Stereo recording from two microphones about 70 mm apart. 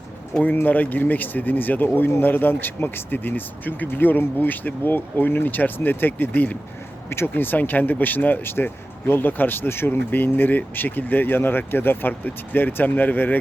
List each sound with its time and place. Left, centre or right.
0.4 s speech: left